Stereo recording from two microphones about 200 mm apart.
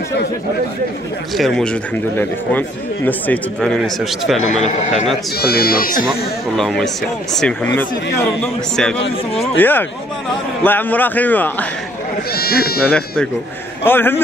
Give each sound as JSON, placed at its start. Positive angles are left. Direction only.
{"t": 1.3, "sound": "speech", "side_deg": 0}
{"t": 5.4, "sound": "speech", "side_deg": 50}
{"t": 6.0, "sound": "speech", "side_deg": 0}
{"t": 9.6, "sound": "speech", "side_deg": 10}
{"t": 12.3, "sound": "speech", "side_deg": 50}
{"t": 12.9, "sound": "speech", "side_deg": 5}